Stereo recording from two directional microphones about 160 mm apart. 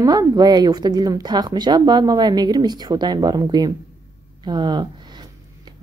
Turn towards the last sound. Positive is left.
turn(degrees=-25)  # may be behind; listen again after turning